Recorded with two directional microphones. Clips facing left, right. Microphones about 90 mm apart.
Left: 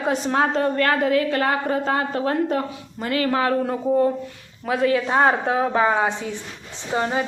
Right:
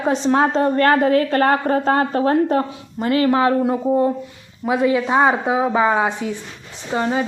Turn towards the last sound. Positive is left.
turn(degrees=-15)  # may be behind; listen again after turning